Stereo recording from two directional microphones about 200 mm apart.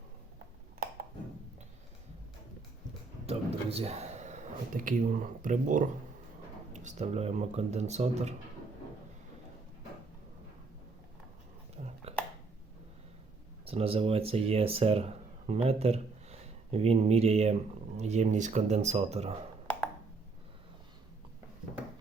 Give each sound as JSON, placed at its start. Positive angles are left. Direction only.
{"t": 3.2, "sound": "speech", "side_deg": -30}
{"t": 11.8, "sound": "a sound", "side_deg": -35}
{"t": 13.7, "sound": "speech", "side_deg": -30}